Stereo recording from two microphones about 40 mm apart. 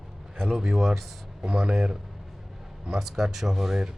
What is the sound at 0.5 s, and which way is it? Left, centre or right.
Speech, centre.